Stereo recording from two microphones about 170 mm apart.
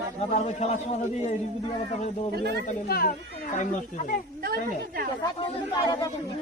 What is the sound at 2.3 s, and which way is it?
Speech, 75° right (ahead or behind).